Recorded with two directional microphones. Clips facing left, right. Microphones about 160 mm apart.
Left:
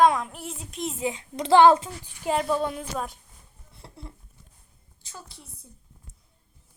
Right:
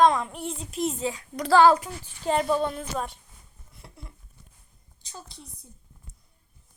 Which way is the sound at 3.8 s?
30° left (ahead or behind).